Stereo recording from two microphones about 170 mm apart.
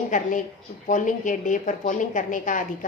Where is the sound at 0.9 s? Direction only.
50° left (ahead or behind).